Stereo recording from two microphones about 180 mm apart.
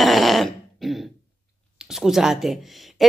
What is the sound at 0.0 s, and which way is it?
Throat clearing, centre (ahead or behind).